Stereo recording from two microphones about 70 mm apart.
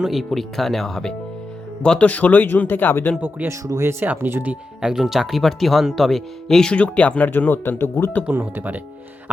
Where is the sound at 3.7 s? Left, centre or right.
Right.